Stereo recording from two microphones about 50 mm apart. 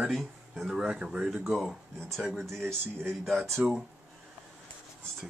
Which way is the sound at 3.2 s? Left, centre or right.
Centre.